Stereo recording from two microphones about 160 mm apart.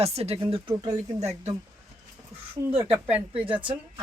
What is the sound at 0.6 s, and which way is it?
Speech, 25° right (ahead or behind).